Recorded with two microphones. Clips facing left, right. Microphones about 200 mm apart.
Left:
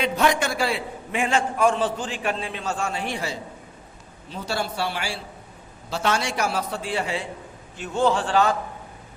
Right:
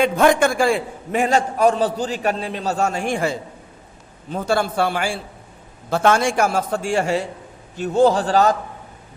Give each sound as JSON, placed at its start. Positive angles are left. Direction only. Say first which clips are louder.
{"t": 0.0, "sound": "a man's voice", "louder": "right 7 dB", "side_deg": -50}